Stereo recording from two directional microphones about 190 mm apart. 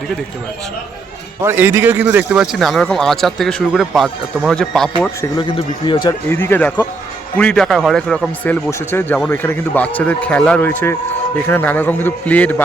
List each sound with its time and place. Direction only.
1.4 s a man's voice: 10° right (ahead or behind)
5.4 s a man's voice: 25° left (ahead or behind)
6.2 s a man's voice: 10° left (ahead or behind)